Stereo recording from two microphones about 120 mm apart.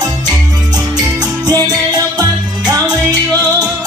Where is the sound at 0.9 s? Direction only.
35° right (ahead or behind).